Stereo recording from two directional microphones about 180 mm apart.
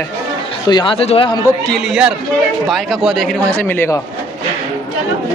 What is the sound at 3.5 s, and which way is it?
Speech, 10° left (ahead or behind).